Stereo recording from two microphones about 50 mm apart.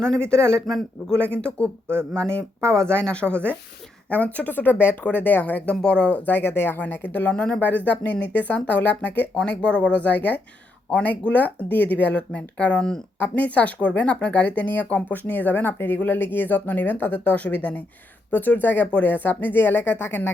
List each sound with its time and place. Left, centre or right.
0.0 s speech: centre
2.1 s speech: centre; by 5.7 s left
5.8 s speech: left
6.8 s speech: left
7.3 s speech: centre
7.6 s speech: left
18.3 s speech: left